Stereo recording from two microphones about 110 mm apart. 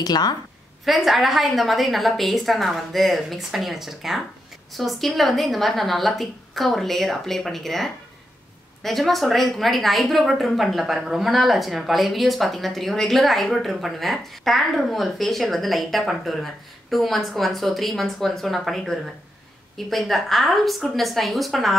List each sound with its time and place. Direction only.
0.0 s a woman's voice: 40° left (ahead or behind)
0.8 s a woman's voice: centre (ahead or behind)